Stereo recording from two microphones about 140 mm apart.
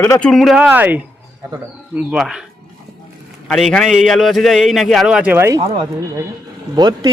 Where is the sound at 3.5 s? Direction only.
5° left (ahead or behind); by 5.5 s 10° right (ahead or behind).